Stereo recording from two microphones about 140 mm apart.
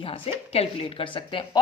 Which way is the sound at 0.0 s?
45° left (ahead or behind).